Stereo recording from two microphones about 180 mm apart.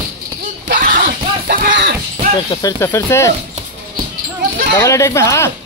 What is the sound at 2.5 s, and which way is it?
Speech, 20° left (ahead or behind).